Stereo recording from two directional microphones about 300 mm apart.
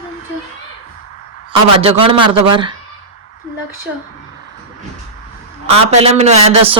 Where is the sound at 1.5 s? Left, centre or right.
Centre.